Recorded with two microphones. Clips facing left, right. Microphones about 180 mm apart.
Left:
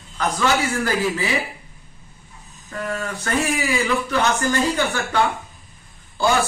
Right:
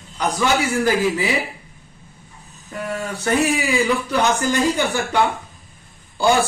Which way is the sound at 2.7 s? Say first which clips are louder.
Right 1 dB; 15° right (ahead or behind).